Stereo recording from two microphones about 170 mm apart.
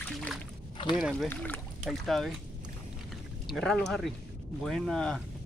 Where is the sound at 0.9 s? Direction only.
Centre (ahead or behind).